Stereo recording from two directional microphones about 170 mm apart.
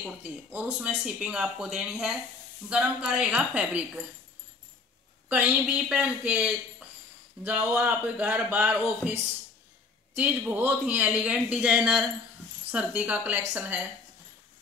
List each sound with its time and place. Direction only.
0.0 s speech: 10° right (ahead or behind)
5.3 s speech: 10° right (ahead or behind)